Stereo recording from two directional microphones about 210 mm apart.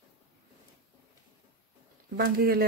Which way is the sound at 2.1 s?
50° right (ahead or behind).